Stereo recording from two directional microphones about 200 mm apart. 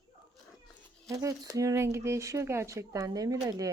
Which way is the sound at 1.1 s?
15° right (ahead or behind).